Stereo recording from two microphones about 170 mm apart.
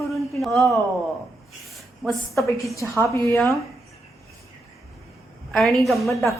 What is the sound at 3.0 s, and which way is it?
Speech, 15° left (ahead or behind).